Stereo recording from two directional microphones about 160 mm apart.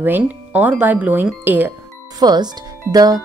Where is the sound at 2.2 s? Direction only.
25° right (ahead or behind).